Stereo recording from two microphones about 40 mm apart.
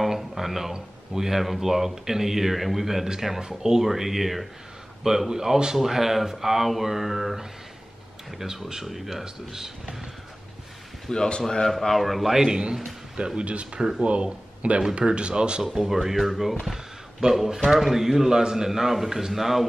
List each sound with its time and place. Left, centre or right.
0.0 s a sound: centre
0.7 s speech: centre
11.1 s a man's voice: left; by 12.5 s centre
13.4 s speech: right
13.7 s speech: centre
14.0 s speech: right
15.7 s speech: centre
16.6 s a sound: centre
17.6 s speech: centre